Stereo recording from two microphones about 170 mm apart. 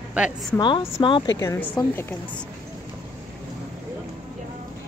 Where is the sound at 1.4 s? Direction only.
15° left (ahead or behind).